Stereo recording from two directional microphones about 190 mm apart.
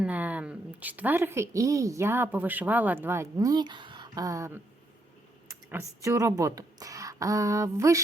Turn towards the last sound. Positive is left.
turn(degrees=-15)  # may be behind; listen again after turning